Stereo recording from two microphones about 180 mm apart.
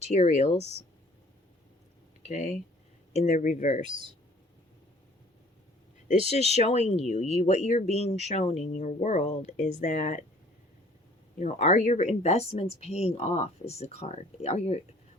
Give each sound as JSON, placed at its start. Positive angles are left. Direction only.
{"t": 0.1, "sound": "speech", "side_deg": 40}
{"t": 0.6, "sound": "speech", "side_deg": -35}
{"t": 2.2, "sound": "speech", "side_deg": 40}
{"t": 3.8, "sound": "speech", "side_deg": -25}
{"t": 6.1, "sound": "speech", "side_deg": 40}
{"t": 11.3, "sound": "speech", "side_deg": 40}